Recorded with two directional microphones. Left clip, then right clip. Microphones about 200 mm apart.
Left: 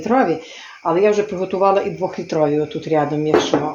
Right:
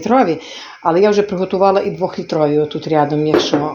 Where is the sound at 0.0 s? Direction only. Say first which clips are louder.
Right 3 dB; 30° right (ahead or behind).